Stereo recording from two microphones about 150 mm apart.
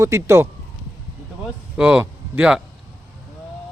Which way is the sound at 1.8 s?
10° right (ahead or behind).